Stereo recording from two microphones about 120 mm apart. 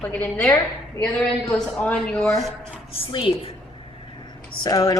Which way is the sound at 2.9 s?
45° left (ahead or behind).